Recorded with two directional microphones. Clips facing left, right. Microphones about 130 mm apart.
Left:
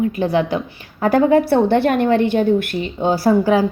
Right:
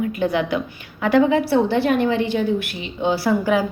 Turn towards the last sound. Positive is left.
turn(degrees=35)  # may be behind; listen again after turning